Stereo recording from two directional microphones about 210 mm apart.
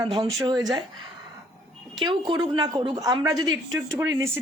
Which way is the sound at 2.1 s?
20° right (ahead or behind).